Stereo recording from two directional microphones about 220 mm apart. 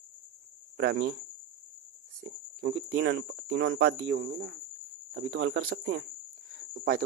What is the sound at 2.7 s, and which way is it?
Speech, 65° right (ahead or behind).